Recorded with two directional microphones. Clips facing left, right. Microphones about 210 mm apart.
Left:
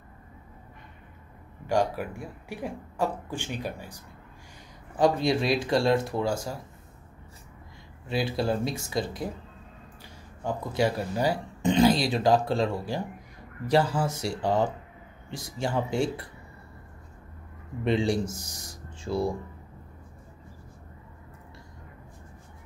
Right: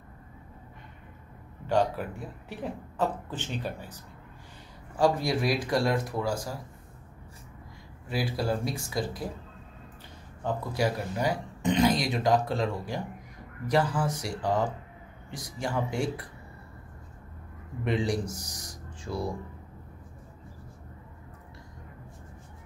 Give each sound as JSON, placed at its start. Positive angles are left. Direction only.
{"t": 1.7, "sound": "speech", "side_deg": 10}
{"t": 4.9, "sound": "speech", "side_deg": 20}
{"t": 8.1, "sound": "speech", "side_deg": 25}
{"t": 10.7, "sound": "speech", "side_deg": 30}
{"t": 17.8, "sound": "speech", "side_deg": 25}